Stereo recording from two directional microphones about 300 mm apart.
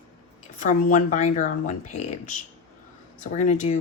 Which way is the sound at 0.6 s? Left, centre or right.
Left.